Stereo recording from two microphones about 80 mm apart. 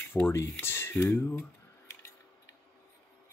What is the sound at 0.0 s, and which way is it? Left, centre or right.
Speech, left.